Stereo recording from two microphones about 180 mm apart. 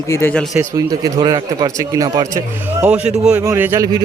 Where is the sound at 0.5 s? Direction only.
20° right (ahead or behind).